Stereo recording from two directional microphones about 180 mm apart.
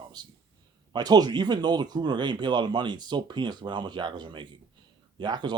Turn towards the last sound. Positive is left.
turn(degrees=-25)  # may be behind; listen again after turning